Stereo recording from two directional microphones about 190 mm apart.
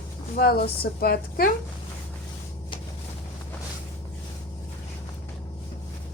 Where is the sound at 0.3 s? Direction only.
55° left (ahead or behind).